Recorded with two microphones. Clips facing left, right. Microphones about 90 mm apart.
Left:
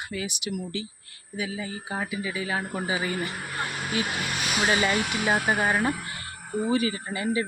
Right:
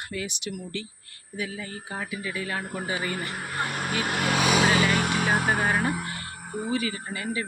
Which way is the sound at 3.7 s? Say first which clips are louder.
Even; 45° right (ahead or behind).